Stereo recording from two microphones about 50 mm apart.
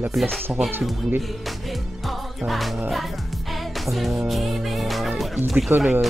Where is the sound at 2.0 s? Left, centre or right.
Centre.